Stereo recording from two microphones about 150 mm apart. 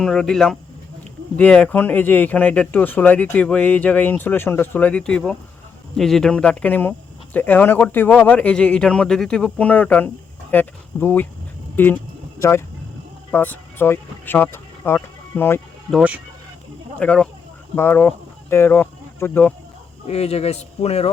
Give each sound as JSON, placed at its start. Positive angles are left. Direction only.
{"t": 0.0, "sound": "speech", "side_deg": 5}
{"t": 15.9, "sound": "speech", "side_deg": -5}
{"t": 17.0, "sound": "speech", "side_deg": 5}
{"t": 20.1, "sound": "speech", "side_deg": 40}